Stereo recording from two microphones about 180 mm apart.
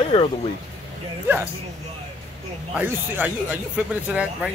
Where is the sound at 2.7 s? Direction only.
10° right (ahead or behind).